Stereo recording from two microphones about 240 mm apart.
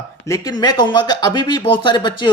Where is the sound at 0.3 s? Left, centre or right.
Centre.